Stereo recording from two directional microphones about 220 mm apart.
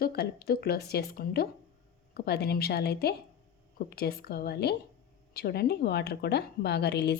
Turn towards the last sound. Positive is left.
turn(degrees=50)  # may be behind; listen again after turning